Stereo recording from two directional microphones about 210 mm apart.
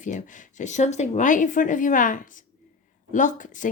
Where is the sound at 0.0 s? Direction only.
35° left (ahead or behind).